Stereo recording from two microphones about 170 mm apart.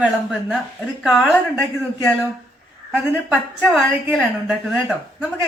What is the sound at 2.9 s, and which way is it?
Speech, 10° right (ahead or behind).